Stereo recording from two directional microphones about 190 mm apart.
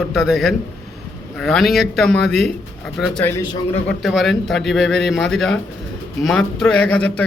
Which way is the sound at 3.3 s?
15° left (ahead or behind).